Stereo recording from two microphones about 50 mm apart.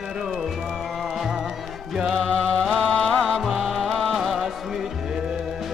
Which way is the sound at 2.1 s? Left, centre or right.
Centre.